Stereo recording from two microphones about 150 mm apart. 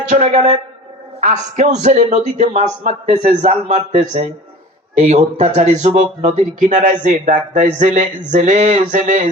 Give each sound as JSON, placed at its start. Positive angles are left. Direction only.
{"t": 0.1, "sound": "speech", "side_deg": -45}